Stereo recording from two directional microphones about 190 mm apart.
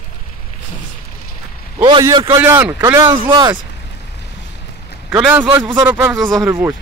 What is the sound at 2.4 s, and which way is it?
Speech, 10° right (ahead or behind).